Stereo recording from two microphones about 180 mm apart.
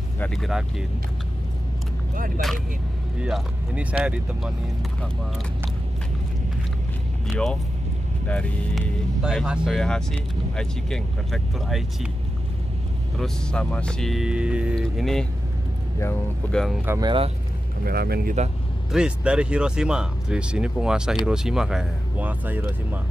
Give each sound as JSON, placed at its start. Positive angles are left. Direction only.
{"t": 0.2, "sound": "speech", "side_deg": 0}
{"t": 2.1, "sound": "speech", "side_deg": -50}
{"t": 3.2, "sound": "speech", "side_deg": -5}
{"t": 8.3, "sound": "speech", "side_deg": 5}
{"t": 13.2, "sound": "speech", "side_deg": 5}
{"t": 16.4, "sound": "speech", "side_deg": 10}
{"t": 16.8, "sound": "speech", "side_deg": -15}
{"t": 17.8, "sound": "speech", "side_deg": -60}
{"t": 18.9, "sound": "speech", "side_deg": -5}